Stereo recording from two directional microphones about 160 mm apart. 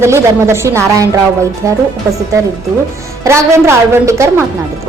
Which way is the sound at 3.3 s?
15° right (ahead or behind).